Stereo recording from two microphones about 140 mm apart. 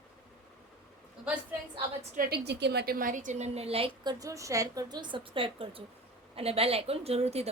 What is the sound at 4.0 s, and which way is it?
A woman's voice, 30° right (ahead or behind).